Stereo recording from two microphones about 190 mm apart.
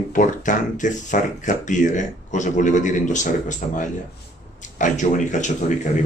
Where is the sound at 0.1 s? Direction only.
40° left (ahead or behind).